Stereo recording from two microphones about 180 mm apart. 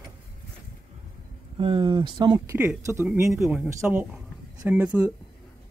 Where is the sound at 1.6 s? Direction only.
30° right (ahead or behind).